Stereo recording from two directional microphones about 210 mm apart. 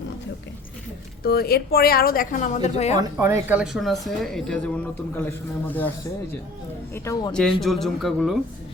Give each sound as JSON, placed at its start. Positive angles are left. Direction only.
{"t": 1.2, "sound": "speech", "side_deg": 45}
{"t": 3.0, "sound": "speech", "side_deg": -15}
{"t": 6.9, "sound": "speech", "side_deg": 15}
{"t": 7.6, "sound": "speech", "side_deg": 0}